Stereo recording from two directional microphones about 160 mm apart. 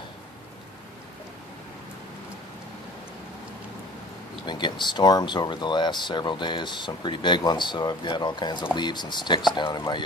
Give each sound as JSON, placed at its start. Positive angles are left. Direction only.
{"t": 4.5, "sound": "speech", "side_deg": 30}